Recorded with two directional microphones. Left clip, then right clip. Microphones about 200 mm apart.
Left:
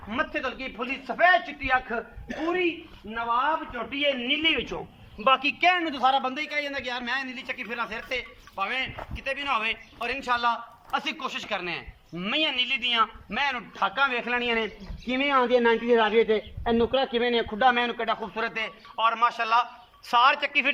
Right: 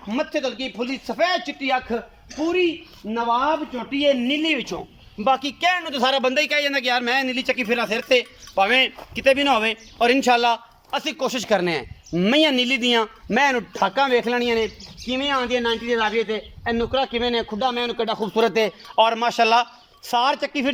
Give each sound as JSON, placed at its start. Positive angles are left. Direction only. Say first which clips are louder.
{"t": 0.1, "sound": "speech", "louder": "right 4 dB", "side_deg": -20}
{"t": 3.9, "sound": "speech", "louder": "right 6 dB", "side_deg": -20}
{"t": 5.2, "sound": "a man's voice", "louder": "right 1 dB", "side_deg": -30}
{"t": 15.0, "sound": "a man's voice", "louder": "right 1 dB", "side_deg": 0}